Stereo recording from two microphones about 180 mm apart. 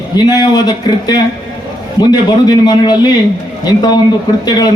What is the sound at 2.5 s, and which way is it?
Speech, 25° left (ahead or behind).